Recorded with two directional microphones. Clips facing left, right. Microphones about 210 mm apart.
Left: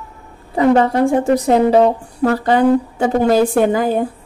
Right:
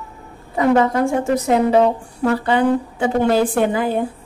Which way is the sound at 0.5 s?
30° left (ahead or behind).